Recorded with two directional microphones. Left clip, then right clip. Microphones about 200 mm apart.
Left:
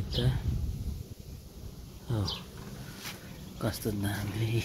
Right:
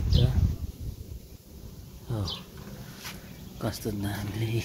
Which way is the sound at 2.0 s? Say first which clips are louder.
Even; 10° left (ahead or behind).